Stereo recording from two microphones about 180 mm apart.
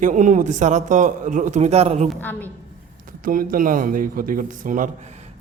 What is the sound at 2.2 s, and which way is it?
Speech, 10° left (ahead or behind).